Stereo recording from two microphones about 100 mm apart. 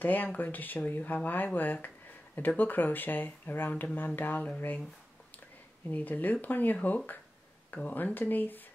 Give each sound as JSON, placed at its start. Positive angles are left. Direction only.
{"t": 0.0, "sound": "speech", "side_deg": 15}
{"t": 5.9, "sound": "speech", "side_deg": 15}